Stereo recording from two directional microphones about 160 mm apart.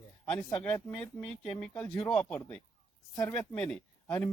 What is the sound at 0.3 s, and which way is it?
Speech, 15° left (ahead or behind).